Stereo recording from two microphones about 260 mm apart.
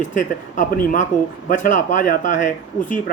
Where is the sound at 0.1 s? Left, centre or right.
Left.